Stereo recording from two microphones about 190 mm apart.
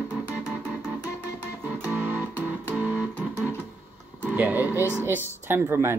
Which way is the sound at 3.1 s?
5° left (ahead or behind).